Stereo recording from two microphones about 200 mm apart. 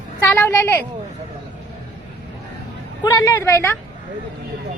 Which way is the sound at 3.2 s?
15° left (ahead or behind).